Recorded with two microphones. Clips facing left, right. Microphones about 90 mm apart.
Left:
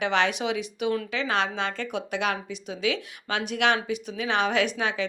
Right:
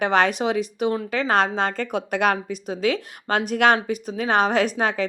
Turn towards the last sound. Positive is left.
turn(degrees=-45)  # may be behind; listen again after turning